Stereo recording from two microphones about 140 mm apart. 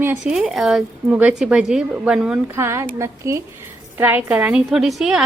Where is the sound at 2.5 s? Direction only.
20° right (ahead or behind).